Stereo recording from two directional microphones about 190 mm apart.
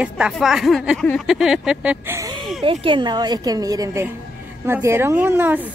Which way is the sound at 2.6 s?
30° right (ahead or behind).